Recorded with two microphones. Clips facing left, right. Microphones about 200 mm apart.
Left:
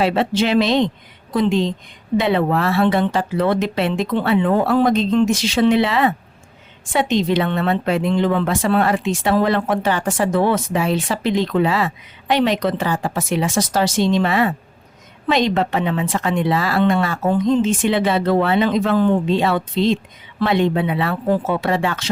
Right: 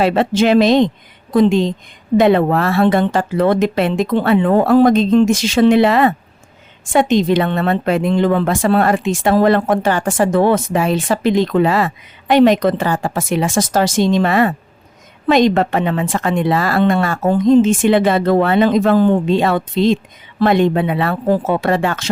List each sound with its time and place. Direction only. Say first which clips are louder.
0.0 s a woman's voice: right 4 dB; 45° right (ahead or behind)